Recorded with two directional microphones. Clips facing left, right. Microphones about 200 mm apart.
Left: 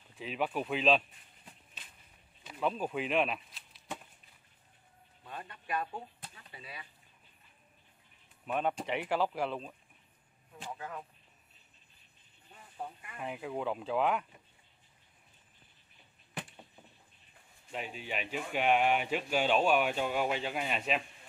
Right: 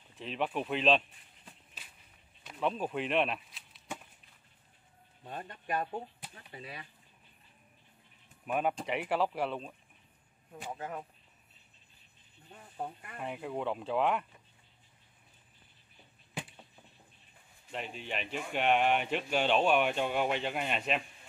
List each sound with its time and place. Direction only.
0.2 s speech: 5° left (ahead or behind)
2.4 s a sound: centre (ahead or behind)
5.2 s speech: 45° right (ahead or behind)
8.5 s speech: 5° right (ahead or behind)
10.8 s speech: 25° right (ahead or behind)
12.5 s a sound: 45° right (ahead or behind)
13.2 s speech: centre (ahead or behind)
17.6 s speech: 5° left (ahead or behind)